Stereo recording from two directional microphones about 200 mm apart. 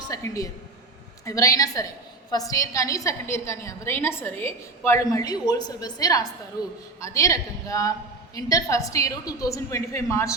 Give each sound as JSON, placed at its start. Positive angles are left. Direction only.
{"t": 0.1, "sound": "a woman's voice", "side_deg": 15}